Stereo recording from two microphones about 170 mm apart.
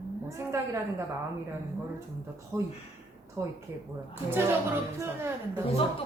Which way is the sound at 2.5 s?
15° right (ahead or behind).